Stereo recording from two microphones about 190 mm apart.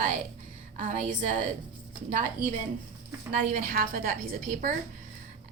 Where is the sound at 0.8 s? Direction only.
40° right (ahead or behind).